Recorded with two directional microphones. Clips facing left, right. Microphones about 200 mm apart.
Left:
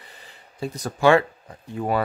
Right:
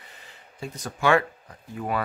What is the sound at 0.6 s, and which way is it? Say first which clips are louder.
Speech: left 6 dB; 35° left (ahead or behind).